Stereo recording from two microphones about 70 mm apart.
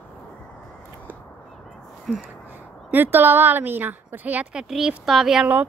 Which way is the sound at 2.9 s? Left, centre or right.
Right.